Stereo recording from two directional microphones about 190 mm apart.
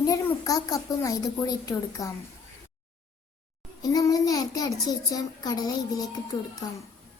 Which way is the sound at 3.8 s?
20° left (ahead or behind).